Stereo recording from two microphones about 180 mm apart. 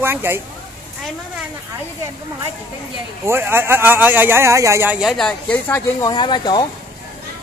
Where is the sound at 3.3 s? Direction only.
10° right (ahead or behind).